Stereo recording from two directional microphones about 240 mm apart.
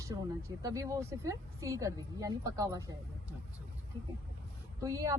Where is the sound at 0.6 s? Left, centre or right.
Centre.